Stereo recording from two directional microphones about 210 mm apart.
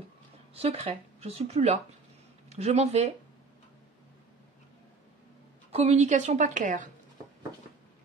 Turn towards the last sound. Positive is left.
turn(degrees=-40)  # may be behind; listen again after turning